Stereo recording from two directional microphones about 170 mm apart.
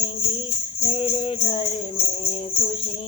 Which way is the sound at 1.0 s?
30° left (ahead or behind).